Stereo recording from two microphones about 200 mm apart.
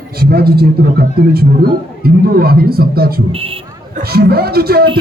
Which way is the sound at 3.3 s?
30° right (ahead or behind).